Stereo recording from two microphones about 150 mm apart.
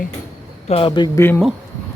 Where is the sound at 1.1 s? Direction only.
15° left (ahead or behind).